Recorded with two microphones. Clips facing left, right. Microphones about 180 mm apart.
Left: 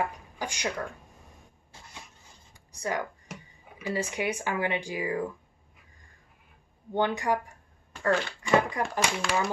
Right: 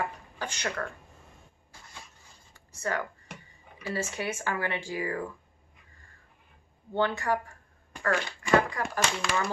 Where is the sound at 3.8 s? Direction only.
15° left (ahead or behind).